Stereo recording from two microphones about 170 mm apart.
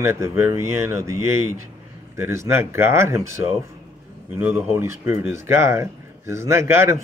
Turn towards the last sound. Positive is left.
turn(degrees=-15)  # may be behind; listen again after turning